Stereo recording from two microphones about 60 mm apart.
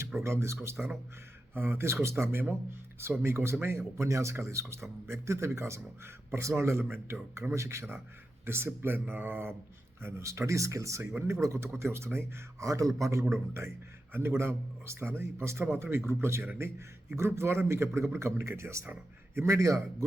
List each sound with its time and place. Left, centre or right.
0.2 s a man's voice: right
8.4 s a man's voice: right
19.5 s speech: right